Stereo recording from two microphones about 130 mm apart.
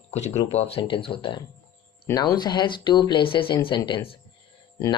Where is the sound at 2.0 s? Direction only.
25° left (ahead or behind).